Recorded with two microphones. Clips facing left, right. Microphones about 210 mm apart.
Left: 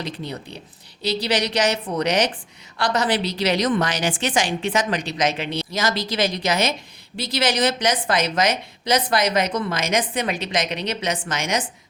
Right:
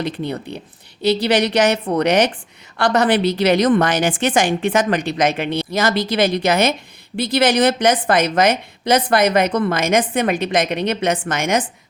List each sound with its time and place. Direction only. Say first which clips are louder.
0.0 s a woman's voice: right 7 dB; 55° right (ahead or behind)